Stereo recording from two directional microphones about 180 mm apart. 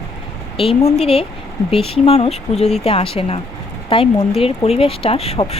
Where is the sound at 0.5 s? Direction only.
30° left (ahead or behind).